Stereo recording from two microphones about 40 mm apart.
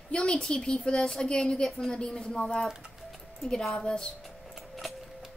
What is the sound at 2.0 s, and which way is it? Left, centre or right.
Speech, left.